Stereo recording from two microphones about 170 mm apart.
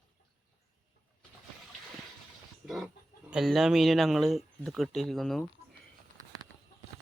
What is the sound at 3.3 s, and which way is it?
Speech, centre (ahead or behind).